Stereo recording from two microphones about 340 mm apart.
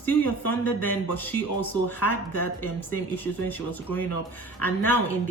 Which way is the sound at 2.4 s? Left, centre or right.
Left.